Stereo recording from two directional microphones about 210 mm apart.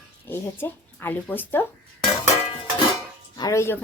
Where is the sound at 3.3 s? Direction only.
15° left (ahead or behind).